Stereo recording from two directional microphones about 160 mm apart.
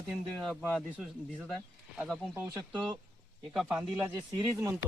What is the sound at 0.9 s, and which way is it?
Speech, 10° right (ahead or behind).